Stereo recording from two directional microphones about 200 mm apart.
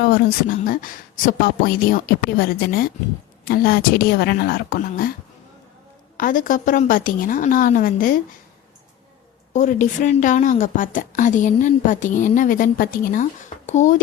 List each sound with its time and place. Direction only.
0.0 s speech: 50° left (ahead or behind)
6.1 s speech: 45° left (ahead or behind)
9.5 s a woman's voice: 35° left (ahead or behind)